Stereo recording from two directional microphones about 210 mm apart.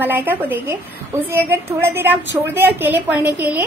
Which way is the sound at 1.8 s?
10° right (ahead or behind).